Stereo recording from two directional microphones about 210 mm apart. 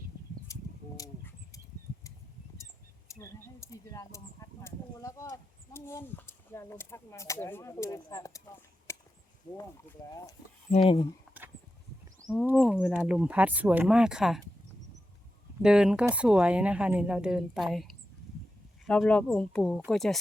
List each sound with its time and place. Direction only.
0.5 s a sound: 15° left (ahead or behind)
3.1 s speech: 15° left (ahead or behind)
8.9 s a sound: 15° left (ahead or behind)
10.1 s speech: 15° left (ahead or behind)
12.5 s a woman's voice: centre (ahead or behind)
15.6 s a woman's voice: 5° right (ahead or behind)